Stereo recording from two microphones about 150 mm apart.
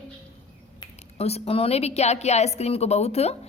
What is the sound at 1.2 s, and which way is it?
A woman's voice, 40° left (ahead or behind).